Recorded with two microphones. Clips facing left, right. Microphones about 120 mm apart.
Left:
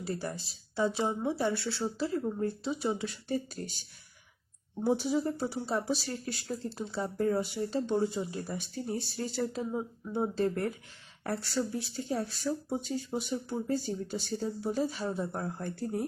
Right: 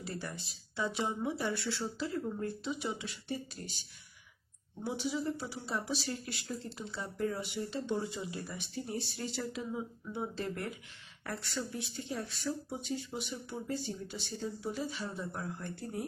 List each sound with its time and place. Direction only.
0.0 s speech: 35° left (ahead or behind)
2.4 s speech: 35° left (ahead or behind)